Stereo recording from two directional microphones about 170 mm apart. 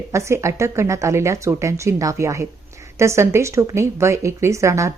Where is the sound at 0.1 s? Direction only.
15° right (ahead or behind).